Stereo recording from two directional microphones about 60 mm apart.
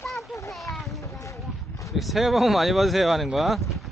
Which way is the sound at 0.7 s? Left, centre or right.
Centre.